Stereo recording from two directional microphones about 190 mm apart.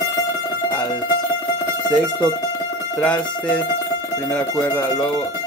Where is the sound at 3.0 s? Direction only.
5° left (ahead or behind).